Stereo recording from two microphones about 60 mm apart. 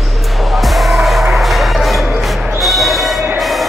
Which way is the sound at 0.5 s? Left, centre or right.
Centre.